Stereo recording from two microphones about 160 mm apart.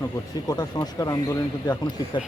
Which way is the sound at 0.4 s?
25° left (ahead or behind).